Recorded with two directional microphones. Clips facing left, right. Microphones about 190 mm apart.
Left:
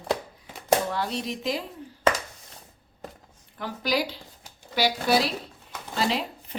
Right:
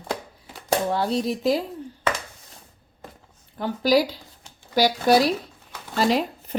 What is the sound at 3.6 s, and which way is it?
Speech, 35° right (ahead or behind).